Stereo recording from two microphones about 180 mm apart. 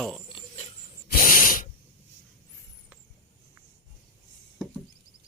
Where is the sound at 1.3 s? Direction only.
50° left (ahead or behind).